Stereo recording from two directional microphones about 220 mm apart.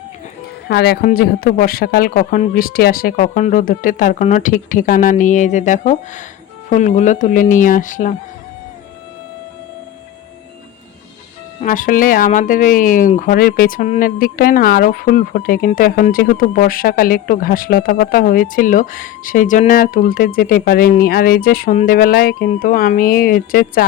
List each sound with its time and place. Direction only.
0.7 s speech: 50° left (ahead or behind)
11.6 s speech: 35° left (ahead or behind)